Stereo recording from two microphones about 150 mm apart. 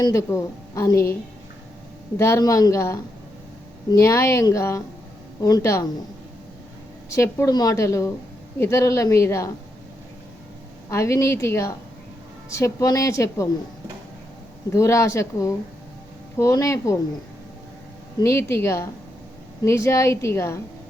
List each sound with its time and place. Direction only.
0.0 s a woman's voice: 20° left (ahead or behind)
2.1 s a woman's voice: 20° left (ahead or behind)
4.0 s a woman's voice: 20° left (ahead or behind)
7.1 s a woman's voice: 20° left (ahead or behind)
10.8 s a woman's voice: 20° left (ahead or behind)
14.7 s a woman's voice: 20° left (ahead or behind)
18.2 s a woman's voice: 20° left (ahead or behind)